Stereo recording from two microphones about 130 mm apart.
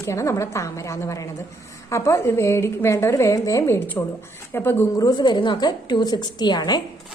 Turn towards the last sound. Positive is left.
turn(degrees=30)  # may be behind; listen again after turning